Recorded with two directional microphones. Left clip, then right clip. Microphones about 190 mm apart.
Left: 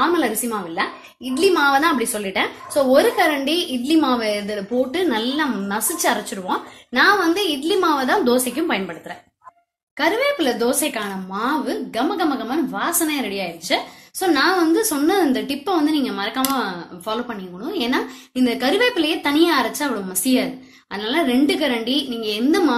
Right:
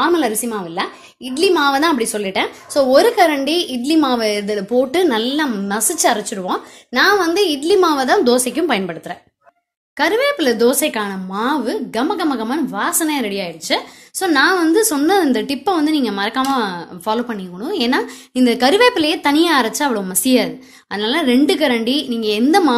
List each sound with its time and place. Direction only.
0.0 s a woman's voice: 40° right (ahead or behind)
9.9 s a woman's voice: 50° right (ahead or behind)